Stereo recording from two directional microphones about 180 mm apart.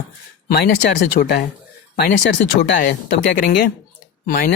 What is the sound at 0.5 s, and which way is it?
Speech, 60° left (ahead or behind).